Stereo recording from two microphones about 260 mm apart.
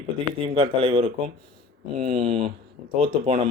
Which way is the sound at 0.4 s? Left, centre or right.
Right.